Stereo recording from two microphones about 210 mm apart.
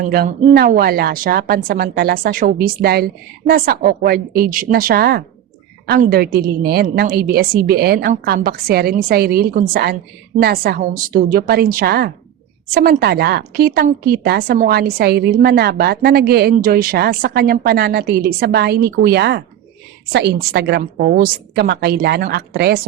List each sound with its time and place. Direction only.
0.0 s a woman's voice: 40° right (ahead or behind)